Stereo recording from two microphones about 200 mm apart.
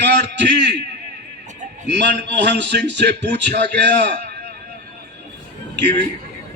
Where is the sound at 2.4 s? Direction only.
60° right (ahead or behind).